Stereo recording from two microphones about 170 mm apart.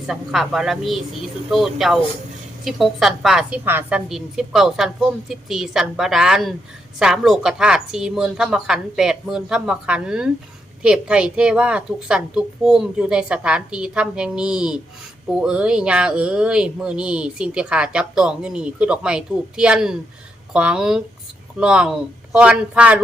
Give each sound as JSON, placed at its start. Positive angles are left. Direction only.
{"t": 0.1, "sound": "speech", "side_deg": -5}